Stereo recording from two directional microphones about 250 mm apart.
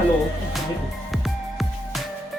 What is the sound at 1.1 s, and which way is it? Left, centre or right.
Music, centre.